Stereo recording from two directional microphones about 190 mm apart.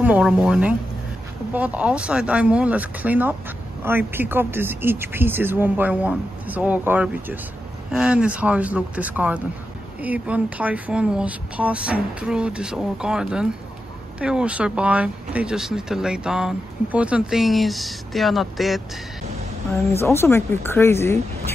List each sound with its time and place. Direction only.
0.0 s speech: 5° right (ahead or behind)
19.8 s speech: 15° left (ahead or behind)